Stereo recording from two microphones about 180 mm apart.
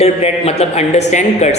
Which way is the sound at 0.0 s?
35° left (ahead or behind).